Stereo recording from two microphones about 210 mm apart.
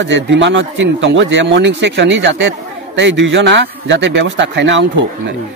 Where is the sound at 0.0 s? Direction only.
60° right (ahead or behind).